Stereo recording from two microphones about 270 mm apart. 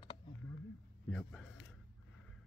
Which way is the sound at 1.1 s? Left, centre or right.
Centre.